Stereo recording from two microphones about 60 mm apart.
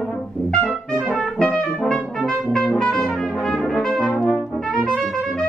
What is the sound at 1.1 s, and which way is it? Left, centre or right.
Brass instrument, centre.